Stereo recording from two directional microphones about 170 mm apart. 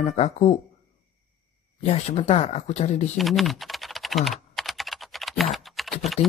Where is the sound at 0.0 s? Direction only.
40° left (ahead or behind).